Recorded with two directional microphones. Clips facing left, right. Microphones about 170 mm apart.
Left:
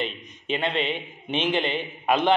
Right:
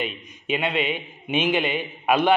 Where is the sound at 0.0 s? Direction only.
10° right (ahead or behind).